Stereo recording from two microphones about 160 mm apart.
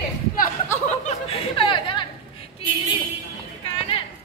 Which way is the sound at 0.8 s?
40° left (ahead or behind).